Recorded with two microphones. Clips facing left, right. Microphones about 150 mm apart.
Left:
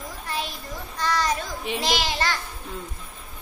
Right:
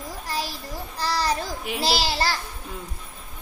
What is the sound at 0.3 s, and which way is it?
Child singing, 35° right (ahead or behind).